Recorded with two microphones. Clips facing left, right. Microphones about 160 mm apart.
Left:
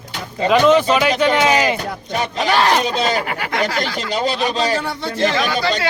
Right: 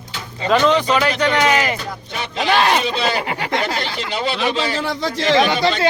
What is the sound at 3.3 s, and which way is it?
Speech, 25° right (ahead or behind).